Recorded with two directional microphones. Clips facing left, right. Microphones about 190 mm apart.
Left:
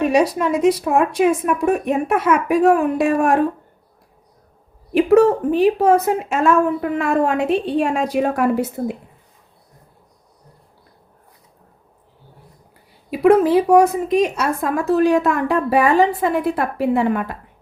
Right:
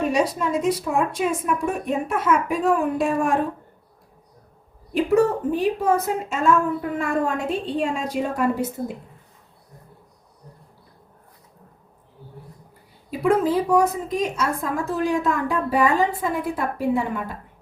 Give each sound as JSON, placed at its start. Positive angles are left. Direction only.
{"t": 0.0, "sound": "a woman's voice", "side_deg": 70}
{"t": 4.9, "sound": "a woman's voice", "side_deg": 75}
{"t": 13.1, "sound": "a woman's voice", "side_deg": 70}